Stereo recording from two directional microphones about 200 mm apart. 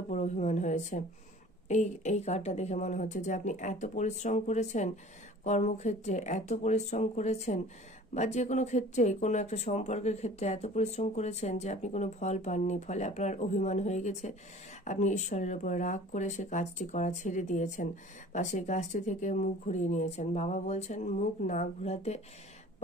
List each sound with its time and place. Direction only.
0.1 s speech: 35° left (ahead or behind)